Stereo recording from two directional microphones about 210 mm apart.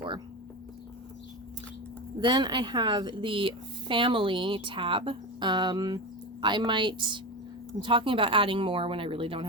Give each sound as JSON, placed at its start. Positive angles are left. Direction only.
{"t": 2.2, "sound": "a woman's voice", "side_deg": -20}